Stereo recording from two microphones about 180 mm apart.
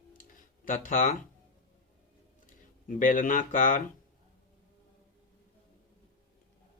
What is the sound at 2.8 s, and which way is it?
Speech, 50° left (ahead or behind).